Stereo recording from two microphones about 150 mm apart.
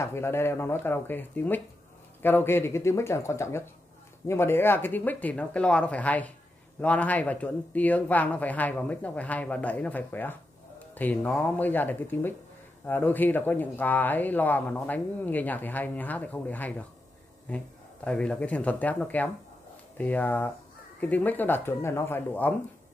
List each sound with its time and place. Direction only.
0.0 s speech: 15° left (ahead or behind)